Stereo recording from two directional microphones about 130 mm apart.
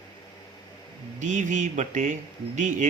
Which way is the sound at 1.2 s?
70° right (ahead or behind).